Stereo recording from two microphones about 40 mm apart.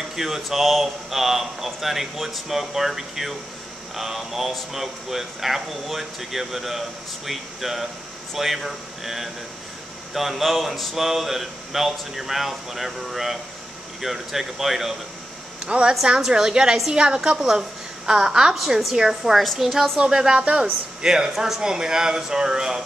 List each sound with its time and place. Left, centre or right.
0.1 s speech: centre
15.6 s speech: right; by 19.0 s centre
19.3 s speech: centre
19.6 s a man's voice: centre